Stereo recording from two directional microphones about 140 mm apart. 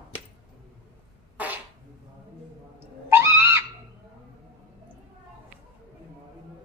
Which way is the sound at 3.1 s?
20° right (ahead or behind).